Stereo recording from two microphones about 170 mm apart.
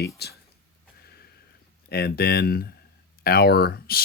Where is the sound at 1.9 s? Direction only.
70° left (ahead or behind).